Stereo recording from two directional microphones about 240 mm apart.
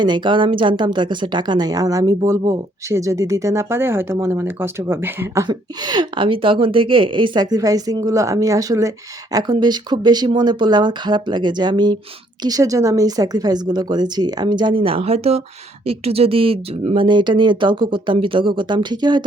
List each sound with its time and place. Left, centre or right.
0.0 s a woman's voice: centre